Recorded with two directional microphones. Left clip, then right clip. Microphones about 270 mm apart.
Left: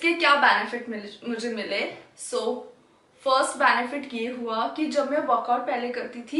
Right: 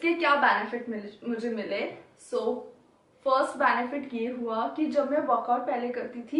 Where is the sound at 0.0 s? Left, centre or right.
Centre.